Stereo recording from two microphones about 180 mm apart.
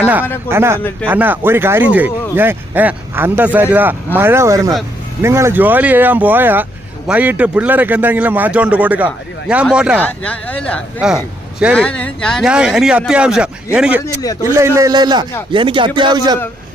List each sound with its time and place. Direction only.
0.0 s a man's voice: 10° right (ahead or behind)
10.0 s speech: 10° left (ahead or behind)
14.0 s speech: 20° left (ahead or behind)
14.4 s a man's voice: 15° right (ahead or behind)